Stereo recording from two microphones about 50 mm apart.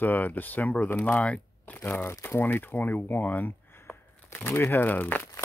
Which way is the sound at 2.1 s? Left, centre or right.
Left.